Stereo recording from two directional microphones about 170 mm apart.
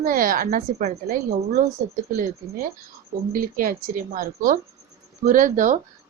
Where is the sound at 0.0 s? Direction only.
55° right (ahead or behind).